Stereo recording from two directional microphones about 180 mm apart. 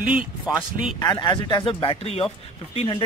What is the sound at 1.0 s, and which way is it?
Speech, 25° left (ahead or behind).